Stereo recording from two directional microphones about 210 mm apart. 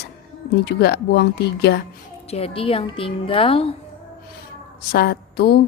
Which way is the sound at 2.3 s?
25° left (ahead or behind).